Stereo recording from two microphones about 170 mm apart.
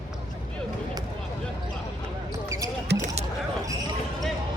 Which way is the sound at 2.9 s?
80° right.